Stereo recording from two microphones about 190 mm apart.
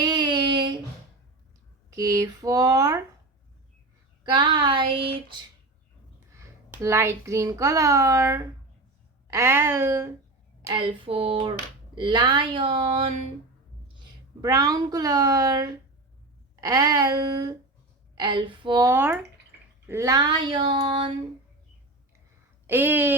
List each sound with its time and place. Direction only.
0.0 s a sound: 20° right (ahead or behind)
1.9 s speech: 20° right (ahead or behind)
4.2 s speech: 25° right (ahead or behind)
6.1 s a child's voice: 15° right (ahead or behind)
10.7 s speech: 25° right (ahead or behind)
14.4 s speech: 20° right (ahead or behind)
22.6 s speech: 10° right (ahead or behind)